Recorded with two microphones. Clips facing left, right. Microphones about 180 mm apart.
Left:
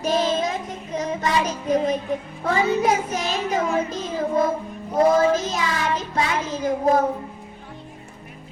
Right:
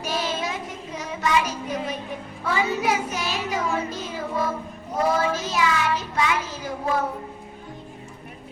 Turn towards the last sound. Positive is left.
turn(degrees=40)  # may be behind; listen again after turning